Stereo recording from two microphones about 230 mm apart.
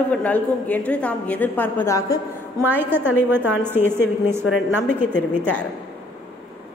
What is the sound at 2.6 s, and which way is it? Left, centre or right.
A woman's voice, centre.